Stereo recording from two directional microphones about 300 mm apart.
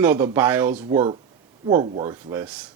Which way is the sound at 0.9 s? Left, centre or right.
Centre.